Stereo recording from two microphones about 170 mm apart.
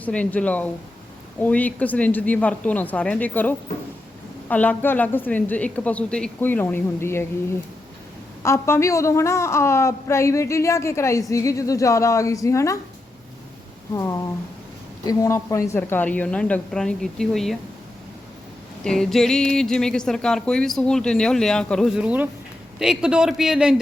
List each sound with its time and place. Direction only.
0.0 s a woman's voice: 10° left (ahead or behind)
8.4 s a woman's voice: 15° left (ahead or behind)
13.9 s a woman's voice: 15° left (ahead or behind); by 17.6 s centre (ahead or behind)
18.9 s speech: 5° left (ahead or behind)